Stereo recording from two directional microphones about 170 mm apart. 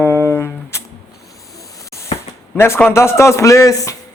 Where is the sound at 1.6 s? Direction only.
20° left (ahead or behind).